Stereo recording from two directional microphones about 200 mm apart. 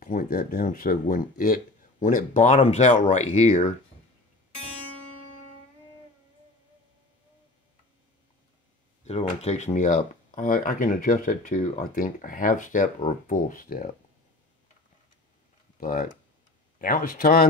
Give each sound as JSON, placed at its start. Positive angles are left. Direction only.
{"t": 0.0, "sound": "speech", "side_deg": 45}
{"t": 9.0, "sound": "speech", "side_deg": 30}
{"t": 15.8, "sound": "speech", "side_deg": 45}